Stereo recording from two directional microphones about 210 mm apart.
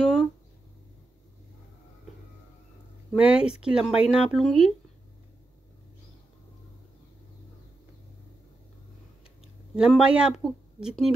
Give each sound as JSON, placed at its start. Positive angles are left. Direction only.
{"t": 0.0, "sound": "a sound", "side_deg": 0}
{"t": 3.1, "sound": "speech", "side_deg": -5}
{"t": 9.8, "sound": "speech", "side_deg": -5}